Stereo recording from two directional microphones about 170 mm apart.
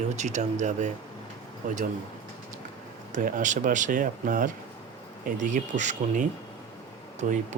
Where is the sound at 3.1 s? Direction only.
50° right (ahead or behind).